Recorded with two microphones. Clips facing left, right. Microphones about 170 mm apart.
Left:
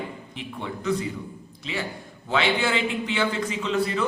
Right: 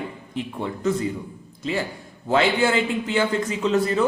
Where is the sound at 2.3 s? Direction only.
40° right (ahead or behind).